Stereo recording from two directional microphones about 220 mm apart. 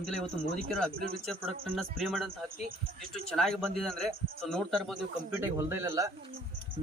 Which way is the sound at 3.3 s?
Centre (ahead or behind).